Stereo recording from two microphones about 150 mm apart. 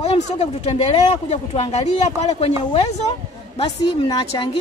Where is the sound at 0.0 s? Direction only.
45° left (ahead or behind).